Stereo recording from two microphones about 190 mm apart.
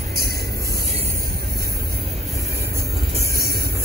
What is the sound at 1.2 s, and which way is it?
Vehicle, 55° right (ahead or behind).